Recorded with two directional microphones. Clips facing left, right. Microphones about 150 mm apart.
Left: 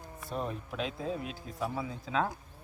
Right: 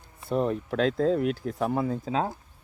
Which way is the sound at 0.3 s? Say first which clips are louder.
Right 10 dB; 65° right (ahead or behind).